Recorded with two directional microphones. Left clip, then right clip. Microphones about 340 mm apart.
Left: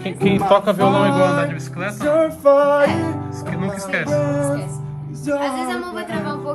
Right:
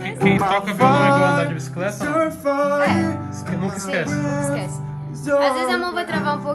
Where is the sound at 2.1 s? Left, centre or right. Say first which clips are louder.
Left 8 dB; centre.